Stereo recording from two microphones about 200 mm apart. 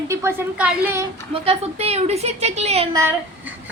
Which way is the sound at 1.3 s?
30° right (ahead or behind).